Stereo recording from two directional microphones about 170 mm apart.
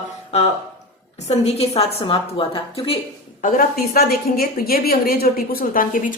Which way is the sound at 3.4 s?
55° left (ahead or behind).